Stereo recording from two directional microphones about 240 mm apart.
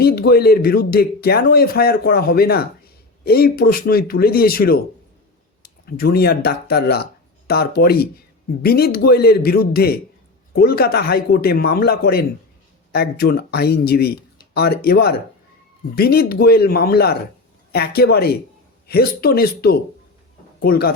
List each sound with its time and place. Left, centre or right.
0.0 s a man's voice: left
5.8 s a man's voice: left